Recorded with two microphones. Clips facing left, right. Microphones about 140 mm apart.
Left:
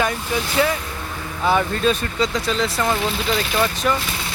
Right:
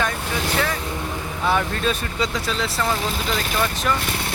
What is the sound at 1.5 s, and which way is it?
Speech, centre (ahead or behind).